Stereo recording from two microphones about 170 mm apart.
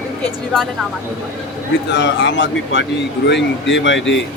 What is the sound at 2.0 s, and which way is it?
Speech, 90° left.